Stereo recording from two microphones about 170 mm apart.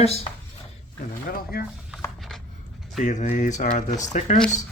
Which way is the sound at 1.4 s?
60° left (ahead or behind).